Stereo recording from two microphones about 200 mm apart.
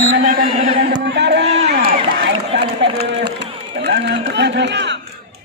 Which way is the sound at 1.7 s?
55° right (ahead or behind).